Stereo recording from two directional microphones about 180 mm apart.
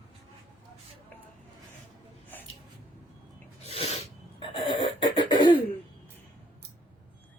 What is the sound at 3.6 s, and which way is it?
Cough, 35° left (ahead or behind).